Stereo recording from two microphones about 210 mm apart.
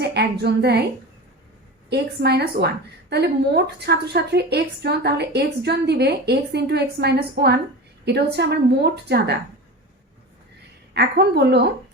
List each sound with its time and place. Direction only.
0.0 s a woman's voice: 50° right (ahead or behind)
1.9 s a woman's voice: 50° right (ahead or behind)
10.9 s a woman's voice: 55° right (ahead or behind)